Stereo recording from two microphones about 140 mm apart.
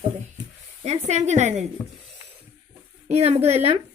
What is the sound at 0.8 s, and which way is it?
Speech, 55° right (ahead or behind).